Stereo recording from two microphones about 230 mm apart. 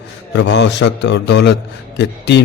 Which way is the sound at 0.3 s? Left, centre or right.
Left.